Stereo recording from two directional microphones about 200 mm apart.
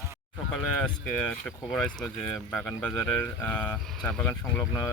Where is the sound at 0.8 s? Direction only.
5° left (ahead or behind).